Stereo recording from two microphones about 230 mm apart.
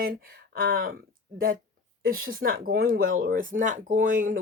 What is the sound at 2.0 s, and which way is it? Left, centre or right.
Speech, right.